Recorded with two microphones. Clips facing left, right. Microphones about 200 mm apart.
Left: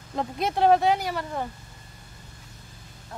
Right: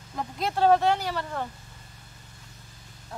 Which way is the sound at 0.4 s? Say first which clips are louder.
Left 1 dB; 15° left (ahead or behind).